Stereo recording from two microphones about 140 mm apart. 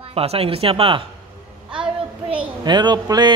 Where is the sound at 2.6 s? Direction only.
30° right (ahead or behind).